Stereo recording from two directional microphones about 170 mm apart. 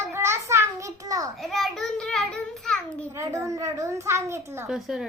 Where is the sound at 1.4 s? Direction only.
Centre (ahead or behind).